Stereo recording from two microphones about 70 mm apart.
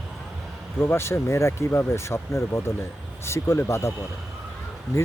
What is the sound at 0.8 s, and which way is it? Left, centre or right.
Speech, left.